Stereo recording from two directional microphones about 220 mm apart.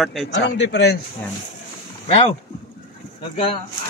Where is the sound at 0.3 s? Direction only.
55° left (ahead or behind).